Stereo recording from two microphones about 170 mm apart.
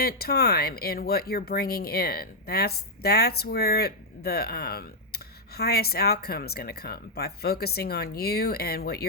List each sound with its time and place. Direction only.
0.0 s speech: 60° left (ahead or behind)